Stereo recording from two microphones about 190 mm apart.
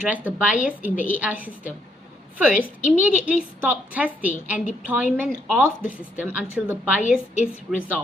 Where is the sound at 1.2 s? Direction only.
10° right (ahead or behind).